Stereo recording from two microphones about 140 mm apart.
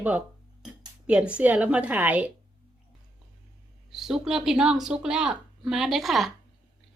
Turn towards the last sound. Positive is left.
turn(degrees=0)  # may be behind; listen again after turning